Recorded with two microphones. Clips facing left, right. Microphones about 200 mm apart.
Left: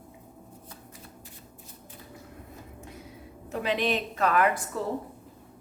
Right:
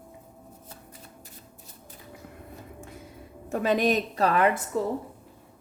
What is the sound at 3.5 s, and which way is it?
A woman's voice, 45° right (ahead or behind).